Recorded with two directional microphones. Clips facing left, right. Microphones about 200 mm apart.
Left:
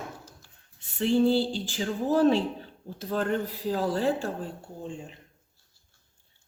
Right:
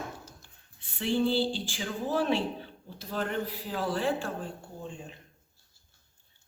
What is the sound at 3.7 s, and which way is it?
Speech, 40° left (ahead or behind).